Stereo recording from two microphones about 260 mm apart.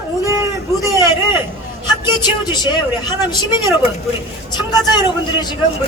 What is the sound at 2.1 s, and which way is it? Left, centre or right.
A woman's voice, centre.